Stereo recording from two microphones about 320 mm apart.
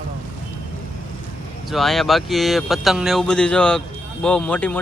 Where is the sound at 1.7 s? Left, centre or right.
Centre.